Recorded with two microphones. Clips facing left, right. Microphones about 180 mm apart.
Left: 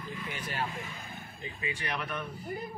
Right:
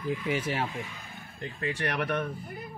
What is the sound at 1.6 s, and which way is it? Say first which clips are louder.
Speech: right 6 dB; 70° right (ahead or behind).